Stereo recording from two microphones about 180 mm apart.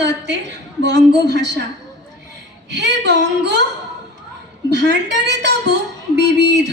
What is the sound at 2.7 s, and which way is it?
Speech, 70° right (ahead or behind).